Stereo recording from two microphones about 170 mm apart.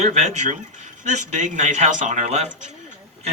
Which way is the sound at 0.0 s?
40° right (ahead or behind).